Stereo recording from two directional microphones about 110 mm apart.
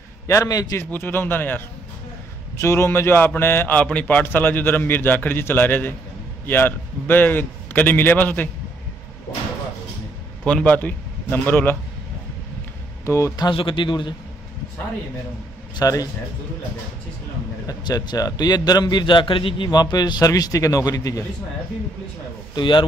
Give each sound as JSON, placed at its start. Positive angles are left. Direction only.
{"t": 0.3, "sound": "a man's voice", "side_deg": 30}
{"t": 0.9, "sound": "a man's voice", "side_deg": 20}
{"t": 10.4, "sound": "a man's voice", "side_deg": 10}
{"t": 13.0, "sound": "speech", "side_deg": 25}
{"t": 13.6, "sound": "a man's voice", "side_deg": 50}
{"t": 15.7, "sound": "a man's voice", "side_deg": 35}
{"t": 17.6, "sound": "a man's voice", "side_deg": 35}
{"t": 22.6, "sound": "a man's voice", "side_deg": 45}